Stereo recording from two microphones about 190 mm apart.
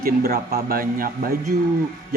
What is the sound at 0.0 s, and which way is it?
Speech, 55° right (ahead or behind).